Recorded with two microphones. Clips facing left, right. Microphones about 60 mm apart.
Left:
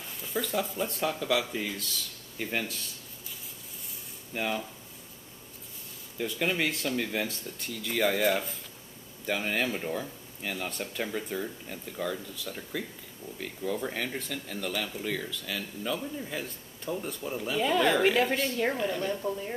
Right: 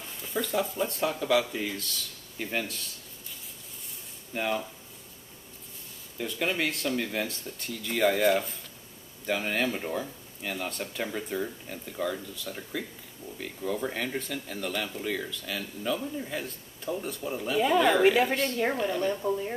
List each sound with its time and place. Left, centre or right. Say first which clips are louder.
0.3 s speech: right 2 dB; centre
4.3 s speech: right 2 dB; centre
6.1 s speech: even; centre